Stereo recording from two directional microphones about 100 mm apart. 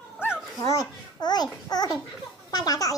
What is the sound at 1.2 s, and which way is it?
Babbling, 45° left (ahead or behind).